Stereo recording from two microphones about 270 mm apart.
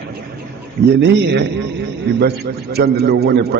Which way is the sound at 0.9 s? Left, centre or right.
Right.